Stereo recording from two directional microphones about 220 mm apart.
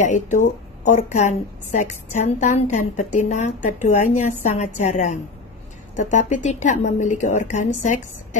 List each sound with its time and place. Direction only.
0.0 s a woman's voice: 35° left (ahead or behind)